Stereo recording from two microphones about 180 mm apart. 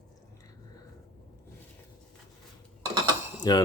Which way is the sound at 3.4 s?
20° left (ahead or behind).